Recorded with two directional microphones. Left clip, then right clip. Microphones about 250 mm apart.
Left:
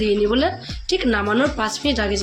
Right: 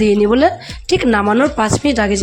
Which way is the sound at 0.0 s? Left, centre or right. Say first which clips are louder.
Right 7 dB; right.